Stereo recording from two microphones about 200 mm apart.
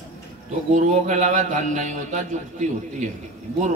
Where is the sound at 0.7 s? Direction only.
40° right (ahead or behind).